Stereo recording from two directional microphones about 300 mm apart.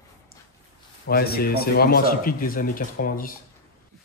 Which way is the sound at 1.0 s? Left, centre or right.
Left.